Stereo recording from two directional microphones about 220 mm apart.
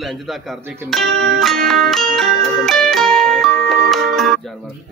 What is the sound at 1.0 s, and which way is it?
Music, 50° right (ahead or behind).